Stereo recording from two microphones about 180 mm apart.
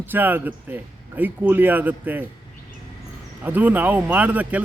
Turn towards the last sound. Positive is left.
turn(degrees=-10)  # may be behind; listen again after turning